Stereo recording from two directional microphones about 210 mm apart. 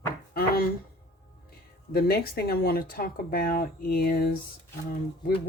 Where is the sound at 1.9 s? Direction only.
50° left (ahead or behind).